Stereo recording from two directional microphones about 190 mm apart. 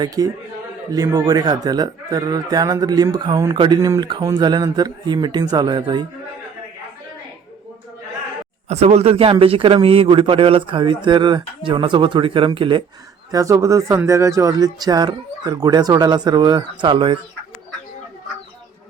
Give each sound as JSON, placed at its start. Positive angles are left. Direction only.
{"t": 0.2, "sound": "speech", "side_deg": -20}
{"t": 8.7, "sound": "speech", "side_deg": -35}
{"t": 13.3, "sound": "speech", "side_deg": -15}